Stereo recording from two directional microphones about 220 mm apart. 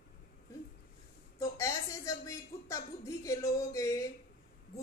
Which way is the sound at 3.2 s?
15° left (ahead or behind).